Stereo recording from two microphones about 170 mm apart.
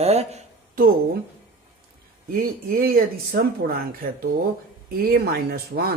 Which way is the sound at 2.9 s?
65° right (ahead or behind).